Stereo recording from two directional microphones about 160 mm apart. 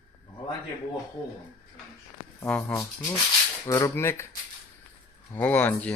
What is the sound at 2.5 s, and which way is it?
Speech, 10° left (ahead or behind).